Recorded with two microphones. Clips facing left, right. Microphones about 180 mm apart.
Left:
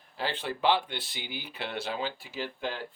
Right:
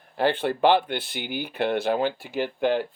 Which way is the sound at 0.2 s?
55° right (ahead or behind).